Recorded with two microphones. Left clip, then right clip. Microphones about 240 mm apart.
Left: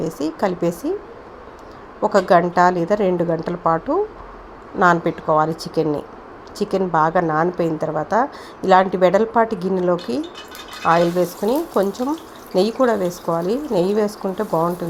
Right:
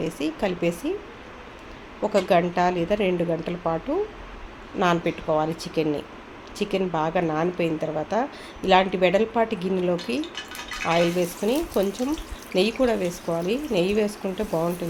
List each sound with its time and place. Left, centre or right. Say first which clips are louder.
0.0 s a woman's voice: left 5 dB; centre
2.0 s a woman's voice: left 6 dB; centre